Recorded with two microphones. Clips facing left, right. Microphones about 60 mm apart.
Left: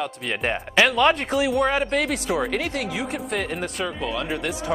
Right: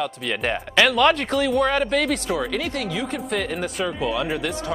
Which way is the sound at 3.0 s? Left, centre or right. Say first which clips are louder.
Right 1 dB; centre.